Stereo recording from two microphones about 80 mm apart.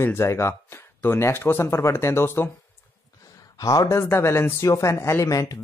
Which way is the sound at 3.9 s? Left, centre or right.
Left.